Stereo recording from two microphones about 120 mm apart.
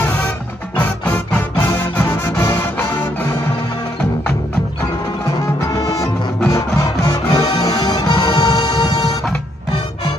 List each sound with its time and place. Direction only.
0.7 s music: 10° left (ahead or behind)
5.7 s music: 30° left (ahead or behind)